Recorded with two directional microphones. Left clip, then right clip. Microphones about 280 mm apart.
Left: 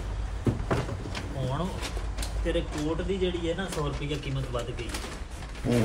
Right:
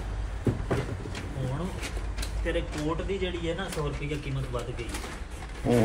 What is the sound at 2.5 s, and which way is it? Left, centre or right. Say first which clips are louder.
Speech: left 1 dB; left.